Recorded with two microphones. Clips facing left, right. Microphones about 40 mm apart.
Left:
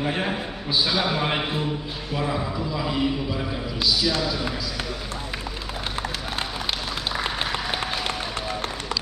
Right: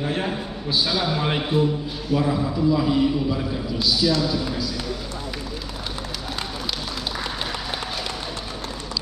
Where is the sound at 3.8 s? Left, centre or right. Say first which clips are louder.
Right 2 dB; left.